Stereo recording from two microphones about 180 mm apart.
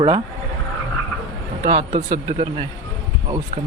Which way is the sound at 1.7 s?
45° right (ahead or behind).